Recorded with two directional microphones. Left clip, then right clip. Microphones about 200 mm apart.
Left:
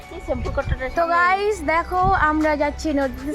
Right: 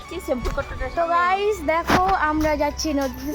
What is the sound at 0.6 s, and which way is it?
Speech, 50° left (ahead or behind).